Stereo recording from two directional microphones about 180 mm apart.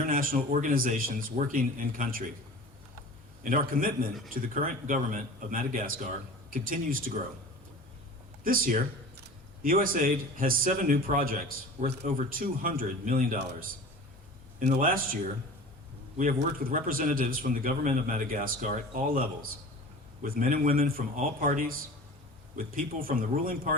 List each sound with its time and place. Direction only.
0.0 s a man's voice: 50° right (ahead or behind)
3.4 s a man's voice: 50° right (ahead or behind)
8.4 s a man's voice: 50° right (ahead or behind)
14.6 s a man's voice: 50° right (ahead or behind)